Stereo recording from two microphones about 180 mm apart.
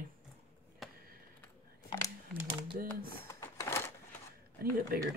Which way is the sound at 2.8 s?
55° right (ahead or behind).